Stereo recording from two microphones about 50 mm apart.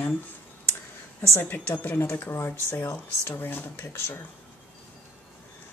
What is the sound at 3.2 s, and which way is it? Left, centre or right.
Speech, left.